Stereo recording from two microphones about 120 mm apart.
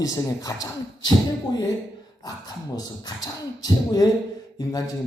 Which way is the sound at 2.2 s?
35° left (ahead or behind).